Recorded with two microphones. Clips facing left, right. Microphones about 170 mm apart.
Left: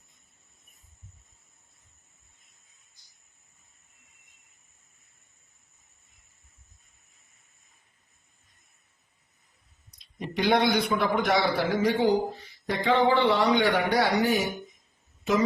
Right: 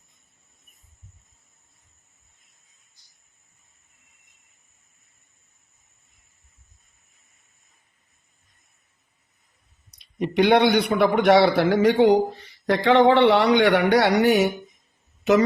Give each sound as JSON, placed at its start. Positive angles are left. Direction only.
{"t": 10.0, "sound": "a man's voice", "side_deg": -65}